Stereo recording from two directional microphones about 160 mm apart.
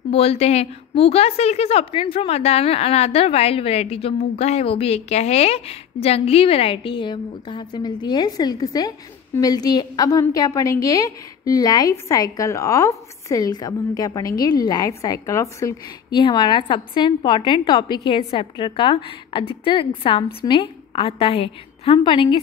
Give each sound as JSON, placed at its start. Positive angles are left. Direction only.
{"t": 0.1, "sound": "a woman's voice", "side_deg": 40}